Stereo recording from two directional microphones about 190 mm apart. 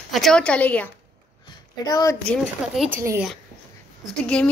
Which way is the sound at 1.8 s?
20° left (ahead or behind).